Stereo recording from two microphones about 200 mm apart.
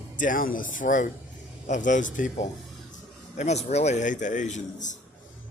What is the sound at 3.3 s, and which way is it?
A man's voice, 35° left (ahead or behind).